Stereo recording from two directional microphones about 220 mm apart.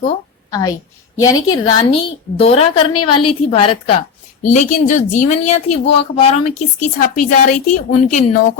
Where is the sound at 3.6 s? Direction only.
25° left (ahead or behind).